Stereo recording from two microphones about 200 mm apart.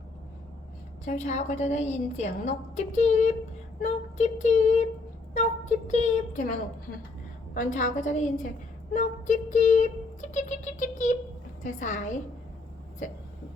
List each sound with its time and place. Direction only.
1.0 s a woman's voice: 40° left (ahead or behind)
7.5 s a woman's voice: 40° left (ahead or behind)